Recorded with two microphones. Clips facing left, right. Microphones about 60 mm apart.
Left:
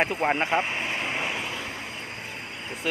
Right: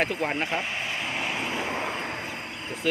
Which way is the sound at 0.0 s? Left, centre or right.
Left.